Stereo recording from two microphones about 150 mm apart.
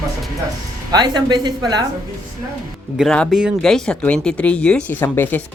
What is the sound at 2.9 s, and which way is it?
Music, 5° left (ahead or behind).